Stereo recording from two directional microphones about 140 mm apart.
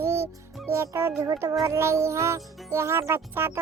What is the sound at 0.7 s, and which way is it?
Speech, 20° right (ahead or behind).